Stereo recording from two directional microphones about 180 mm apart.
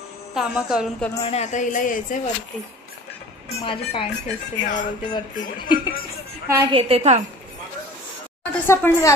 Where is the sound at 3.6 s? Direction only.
30° left (ahead or behind).